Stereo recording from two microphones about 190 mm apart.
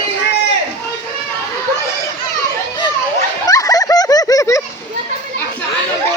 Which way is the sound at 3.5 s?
20° left (ahead or behind).